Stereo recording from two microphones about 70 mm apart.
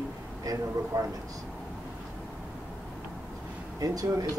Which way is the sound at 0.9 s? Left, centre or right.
Right.